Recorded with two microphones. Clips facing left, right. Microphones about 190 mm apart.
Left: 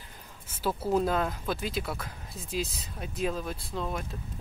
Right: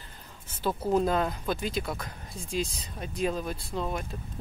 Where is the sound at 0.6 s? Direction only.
5° left (ahead or behind).